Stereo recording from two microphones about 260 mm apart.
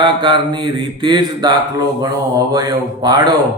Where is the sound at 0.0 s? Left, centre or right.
Centre.